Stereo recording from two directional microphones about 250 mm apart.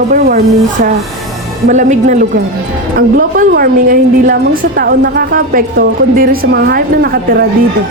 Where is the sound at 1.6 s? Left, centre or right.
Right.